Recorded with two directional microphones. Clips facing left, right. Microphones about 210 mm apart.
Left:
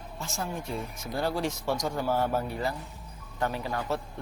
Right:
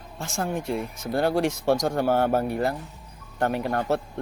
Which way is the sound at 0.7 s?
65° right (ahead or behind).